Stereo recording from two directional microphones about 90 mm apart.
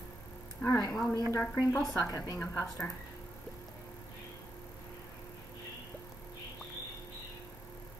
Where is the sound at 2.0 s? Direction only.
40° left (ahead or behind).